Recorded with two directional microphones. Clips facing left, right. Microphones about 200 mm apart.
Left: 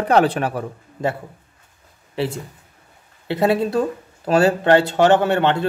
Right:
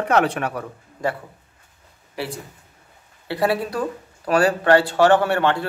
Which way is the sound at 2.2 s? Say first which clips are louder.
Left 6 dB; 25° left (ahead or behind).